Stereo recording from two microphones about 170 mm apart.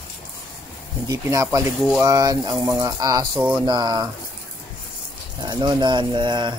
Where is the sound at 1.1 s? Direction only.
20° right (ahead or behind).